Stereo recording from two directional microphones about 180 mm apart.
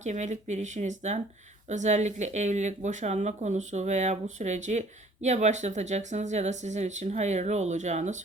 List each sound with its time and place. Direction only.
0.0 s speech: 40° right (ahead or behind)